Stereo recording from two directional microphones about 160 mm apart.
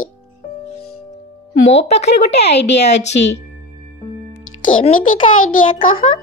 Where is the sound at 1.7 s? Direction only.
45° left (ahead or behind).